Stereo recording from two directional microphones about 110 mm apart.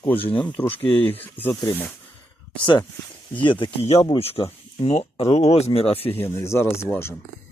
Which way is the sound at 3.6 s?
65° left (ahead or behind).